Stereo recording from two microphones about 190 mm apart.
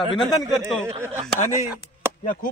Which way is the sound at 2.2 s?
45° left (ahead or behind).